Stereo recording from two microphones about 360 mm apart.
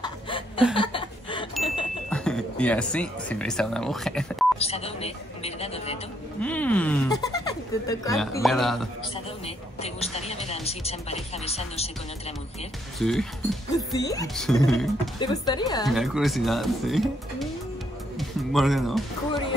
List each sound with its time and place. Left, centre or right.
0.0 s chuckle: centre
2.0 s speech: centre
4.6 s speech: centre
6.4 s speech: centre
9.8 s speech: centre
13.0 s speech: centre
15.1 s speech: centre
15.9 s speech: centre
18.1 s music: centre